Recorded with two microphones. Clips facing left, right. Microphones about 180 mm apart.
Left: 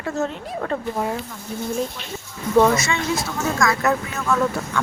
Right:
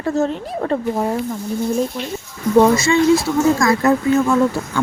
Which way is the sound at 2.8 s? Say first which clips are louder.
Right 10 dB; 30° right (ahead or behind).